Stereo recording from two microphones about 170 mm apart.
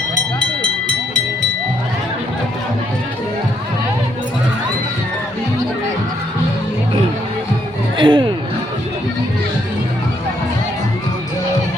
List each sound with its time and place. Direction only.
7.9 s speech: 30° right (ahead or behind)